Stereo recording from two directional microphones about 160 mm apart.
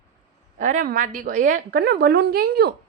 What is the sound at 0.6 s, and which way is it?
A woman's voice, 55° right (ahead or behind).